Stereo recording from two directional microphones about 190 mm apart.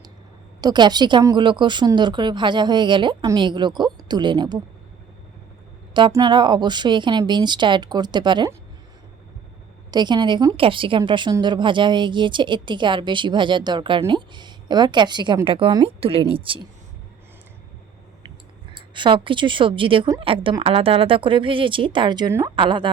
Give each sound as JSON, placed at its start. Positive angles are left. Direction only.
{"t": 0.6, "sound": "a woman's voice", "side_deg": -20}
{"t": 5.9, "sound": "a woman's voice", "side_deg": -20}
{"t": 9.9, "sound": "a woman's voice", "side_deg": -25}
{"t": 18.7, "sound": "a woman's voice", "side_deg": -25}
{"t": 22.5, "sound": "a woman's voice", "side_deg": -25}